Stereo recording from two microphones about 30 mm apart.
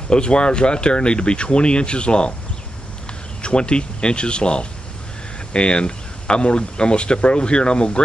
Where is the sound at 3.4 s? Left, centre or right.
Left.